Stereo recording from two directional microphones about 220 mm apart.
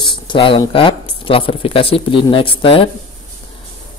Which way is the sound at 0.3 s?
20° left (ahead or behind).